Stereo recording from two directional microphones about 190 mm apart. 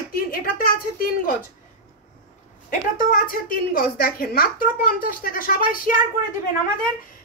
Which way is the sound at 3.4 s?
45° left (ahead or behind).